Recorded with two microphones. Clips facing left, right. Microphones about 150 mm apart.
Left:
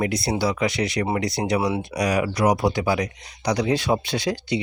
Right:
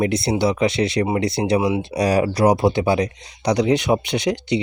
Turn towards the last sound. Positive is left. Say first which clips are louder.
# right 4 dB
turn(degrees=-20)  # may be behind; listen again after turning